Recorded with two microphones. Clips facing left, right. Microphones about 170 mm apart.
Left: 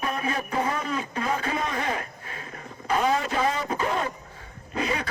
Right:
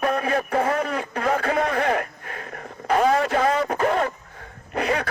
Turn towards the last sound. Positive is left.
turn(degrees=-60)  # may be behind; listen again after turning